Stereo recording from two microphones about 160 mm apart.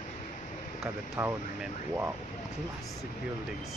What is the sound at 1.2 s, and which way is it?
Vehicle, 15° right (ahead or behind).